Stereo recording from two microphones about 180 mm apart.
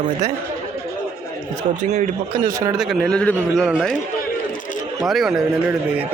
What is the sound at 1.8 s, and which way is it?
Speech, 45° right (ahead or behind).